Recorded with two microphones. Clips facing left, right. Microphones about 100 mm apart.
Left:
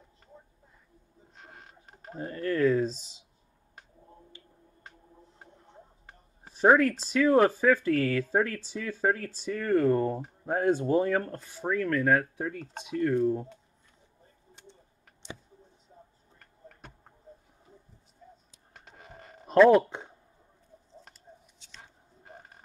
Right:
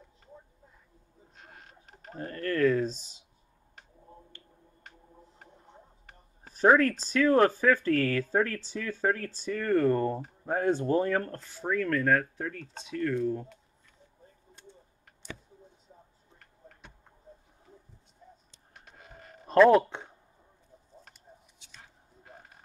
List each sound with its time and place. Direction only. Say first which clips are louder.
2.1 s speech: left 1 dB; 10° left (ahead or behind)
6.6 s speech: left 1 dB; 5° left (ahead or behind)
18.9 s printer: left 2 dB; 35° left (ahead or behind)
19.4 s speech: left 1 dB; centre (ahead or behind)